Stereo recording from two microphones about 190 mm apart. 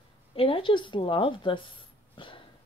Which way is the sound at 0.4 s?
25° left (ahead or behind).